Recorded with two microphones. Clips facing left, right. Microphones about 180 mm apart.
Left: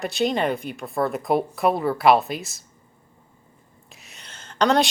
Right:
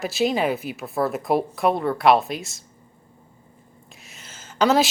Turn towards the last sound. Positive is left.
turn(degrees=-5)  # may be behind; listen again after turning